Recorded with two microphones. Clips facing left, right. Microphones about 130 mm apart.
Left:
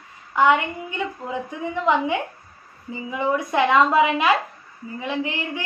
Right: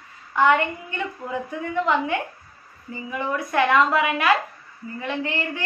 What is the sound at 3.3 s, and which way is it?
A woman's voice, 20° left (ahead or behind).